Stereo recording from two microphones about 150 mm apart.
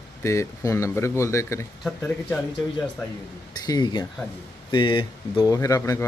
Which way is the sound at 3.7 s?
30° left (ahead or behind).